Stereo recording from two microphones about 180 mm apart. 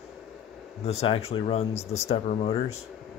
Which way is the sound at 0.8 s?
35° left (ahead or behind).